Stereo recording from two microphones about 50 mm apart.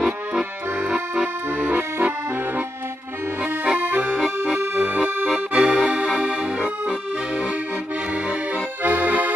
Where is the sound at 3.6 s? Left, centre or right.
Right.